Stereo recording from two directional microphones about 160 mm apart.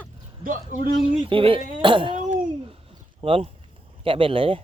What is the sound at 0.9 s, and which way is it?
Speech, 35° right (ahead or behind).